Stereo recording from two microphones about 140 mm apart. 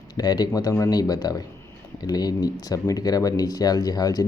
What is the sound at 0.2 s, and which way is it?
Speech, 30° left (ahead or behind).